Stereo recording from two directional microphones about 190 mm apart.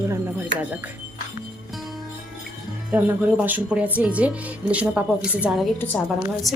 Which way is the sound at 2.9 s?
10° right (ahead or behind).